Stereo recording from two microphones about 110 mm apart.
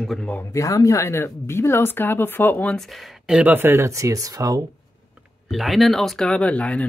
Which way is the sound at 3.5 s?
20° right (ahead or behind).